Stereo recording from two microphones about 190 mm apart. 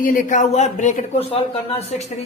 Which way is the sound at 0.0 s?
45° left (ahead or behind).